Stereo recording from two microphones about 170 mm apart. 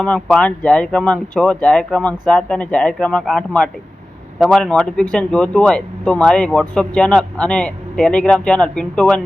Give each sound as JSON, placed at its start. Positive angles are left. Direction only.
{"t": 0.0, "sound": "speech", "side_deg": 5}